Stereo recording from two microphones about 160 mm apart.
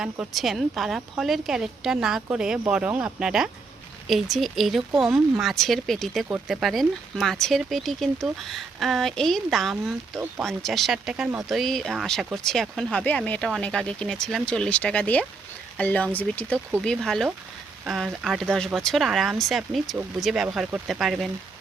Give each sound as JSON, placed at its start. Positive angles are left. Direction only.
{"t": 0.0, "sound": "speech", "side_deg": -5}